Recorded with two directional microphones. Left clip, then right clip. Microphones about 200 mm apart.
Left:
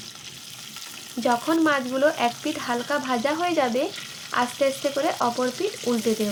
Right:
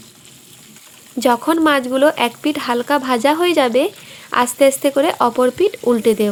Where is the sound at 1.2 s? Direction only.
55° right (ahead or behind).